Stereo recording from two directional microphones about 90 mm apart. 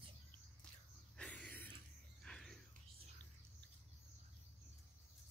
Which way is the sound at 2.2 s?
5° left (ahead or behind).